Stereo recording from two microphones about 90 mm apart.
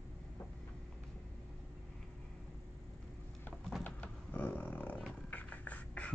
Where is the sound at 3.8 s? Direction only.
15° left (ahead or behind).